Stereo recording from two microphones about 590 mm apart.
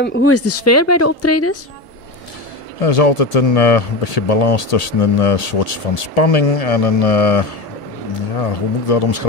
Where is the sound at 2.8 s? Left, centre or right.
Left.